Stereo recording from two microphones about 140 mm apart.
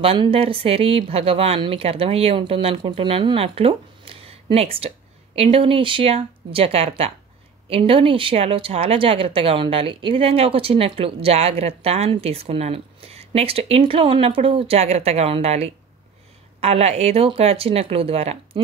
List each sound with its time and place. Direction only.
0.0 s speech: 40° right (ahead or behind)